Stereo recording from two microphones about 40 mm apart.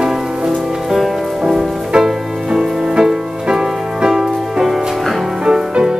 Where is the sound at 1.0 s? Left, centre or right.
Centre.